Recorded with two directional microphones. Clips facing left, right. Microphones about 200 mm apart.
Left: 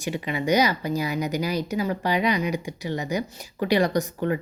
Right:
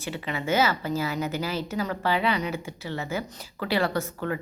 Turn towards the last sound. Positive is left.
turn(degrees=20)  # may be behind; listen again after turning